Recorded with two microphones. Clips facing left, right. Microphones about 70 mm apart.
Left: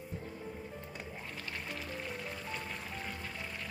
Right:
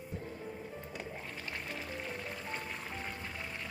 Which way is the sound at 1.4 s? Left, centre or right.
Centre.